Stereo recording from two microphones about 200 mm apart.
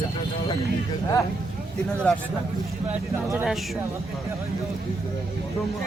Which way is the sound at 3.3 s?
Centre (ahead or behind).